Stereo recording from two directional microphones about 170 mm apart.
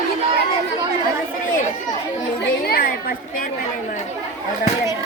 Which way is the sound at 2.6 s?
60° left (ahead or behind).